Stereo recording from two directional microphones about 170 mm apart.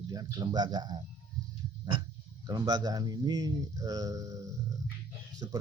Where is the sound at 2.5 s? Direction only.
20° right (ahead or behind).